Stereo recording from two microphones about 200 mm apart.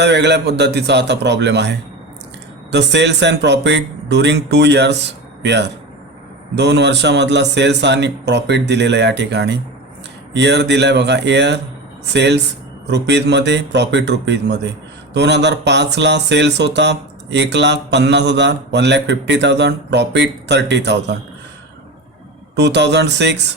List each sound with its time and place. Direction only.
0.0 s speech: 60° right (ahead or behind)
22.5 s speech: 60° right (ahead or behind)